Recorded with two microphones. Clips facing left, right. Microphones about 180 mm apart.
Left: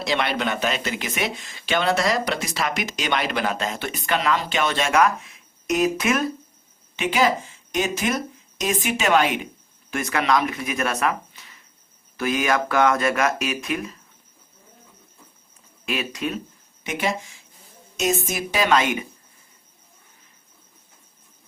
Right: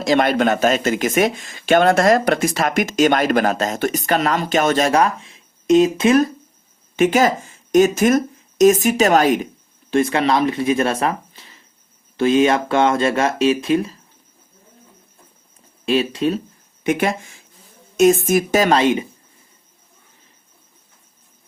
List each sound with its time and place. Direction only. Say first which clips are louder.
0.0 s speech: right 8 dB; 45° right (ahead or behind); by 6.2 s 30° right (ahead or behind)
6.9 s speech: right 6 dB; 45° right (ahead or behind)
9.9 s speech: right 5 dB; 30° right (ahead or behind)
15.9 s speech: right 9 dB; 30° right (ahead or behind)
16.8 s speech: right 7 dB; 55° right (ahead or behind); by 19.0 s 30° right (ahead or behind)